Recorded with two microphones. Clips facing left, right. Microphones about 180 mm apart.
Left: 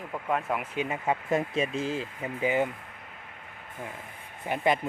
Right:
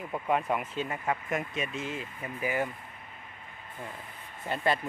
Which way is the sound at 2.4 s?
20° left (ahead or behind).